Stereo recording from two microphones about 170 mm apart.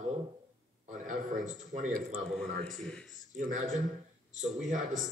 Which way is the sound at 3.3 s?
50° right (ahead or behind).